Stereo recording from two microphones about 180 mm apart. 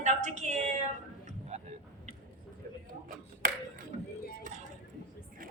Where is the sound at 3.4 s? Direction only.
50° right (ahead or behind).